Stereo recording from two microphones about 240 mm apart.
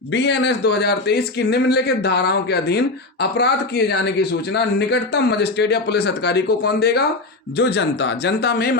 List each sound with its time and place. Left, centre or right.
0.1 s a man's voice: left